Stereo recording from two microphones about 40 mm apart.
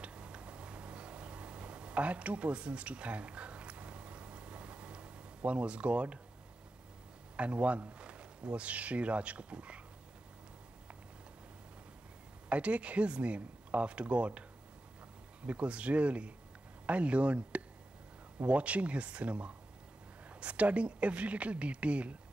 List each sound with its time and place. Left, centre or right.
0.0 s a sound: right
7.3 s speech: right
12.4 s speech: right
15.4 s speech: right